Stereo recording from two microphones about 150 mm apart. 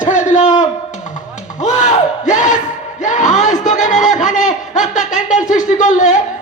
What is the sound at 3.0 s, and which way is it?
Music, 60° left (ahead or behind).